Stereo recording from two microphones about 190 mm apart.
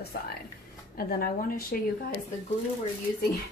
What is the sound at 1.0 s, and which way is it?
Speech, 50° left (ahead or behind).